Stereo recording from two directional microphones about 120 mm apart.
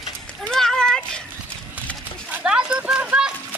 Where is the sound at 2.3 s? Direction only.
10° right (ahead or behind).